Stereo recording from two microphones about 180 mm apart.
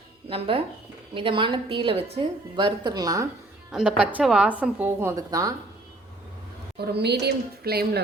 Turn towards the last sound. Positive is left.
turn(degrees=-60)  # may be behind; listen again after turning